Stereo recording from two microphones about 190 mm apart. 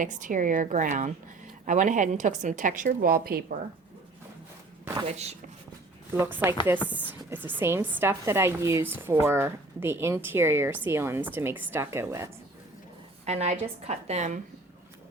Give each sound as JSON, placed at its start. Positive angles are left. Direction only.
{"t": 0.0, "sound": "a woman's voice", "side_deg": -45}
{"t": 5.0, "sound": "a woman's voice", "side_deg": -35}
{"t": 6.1, "sound": "a woman's voice", "side_deg": -10}
{"t": 13.2, "sound": "a woman's voice", "side_deg": -35}